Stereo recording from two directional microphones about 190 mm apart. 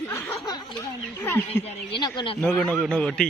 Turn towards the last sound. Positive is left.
turn(degrees=5)  # may be behind; listen again after turning